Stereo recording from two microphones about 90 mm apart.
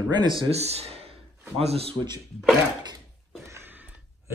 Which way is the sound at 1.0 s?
90° right.